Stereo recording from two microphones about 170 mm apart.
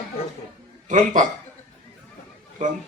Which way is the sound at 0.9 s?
50° right (ahead or behind).